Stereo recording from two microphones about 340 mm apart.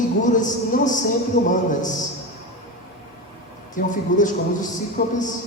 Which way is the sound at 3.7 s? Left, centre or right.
Left.